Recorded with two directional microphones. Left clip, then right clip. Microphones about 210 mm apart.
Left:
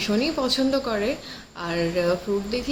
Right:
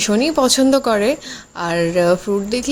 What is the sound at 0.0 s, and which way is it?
Speech, 50° right (ahead or behind).